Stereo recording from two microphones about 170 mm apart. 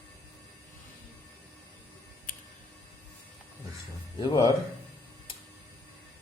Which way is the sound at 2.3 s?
50° left (ahead or behind).